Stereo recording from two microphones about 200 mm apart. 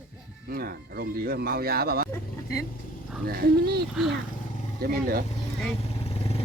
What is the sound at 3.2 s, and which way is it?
Speech, 50° right (ahead or behind).